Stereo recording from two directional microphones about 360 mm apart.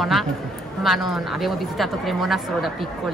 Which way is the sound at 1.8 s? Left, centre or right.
Centre.